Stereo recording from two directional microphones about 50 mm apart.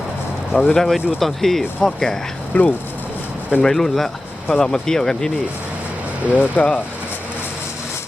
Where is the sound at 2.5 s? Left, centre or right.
Left.